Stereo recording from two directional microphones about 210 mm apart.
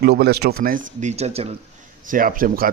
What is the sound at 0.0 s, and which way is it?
A man's voice, 50° right (ahead or behind).